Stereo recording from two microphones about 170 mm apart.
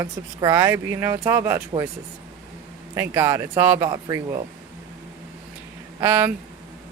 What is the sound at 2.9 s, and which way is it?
Speech, 15° right (ahead or behind).